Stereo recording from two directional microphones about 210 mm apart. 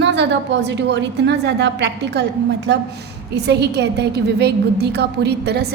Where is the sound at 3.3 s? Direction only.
55° right (ahead or behind).